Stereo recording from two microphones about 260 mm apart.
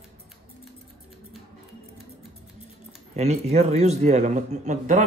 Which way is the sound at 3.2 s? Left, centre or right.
Right.